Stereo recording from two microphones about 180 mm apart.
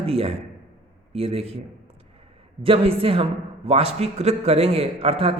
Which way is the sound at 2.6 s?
30° right (ahead or behind).